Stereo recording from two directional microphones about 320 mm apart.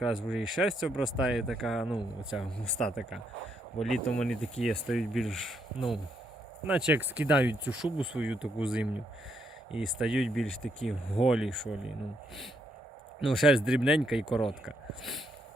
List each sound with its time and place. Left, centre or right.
0.0 s speech: centre
6.7 s speech: centre
13.2 s speech: centre